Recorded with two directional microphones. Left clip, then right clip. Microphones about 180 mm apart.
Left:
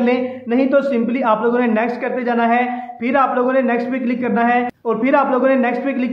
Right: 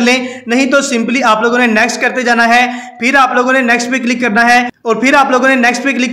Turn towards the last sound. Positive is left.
turn(degrees=-20)  # may be behind; listen again after turning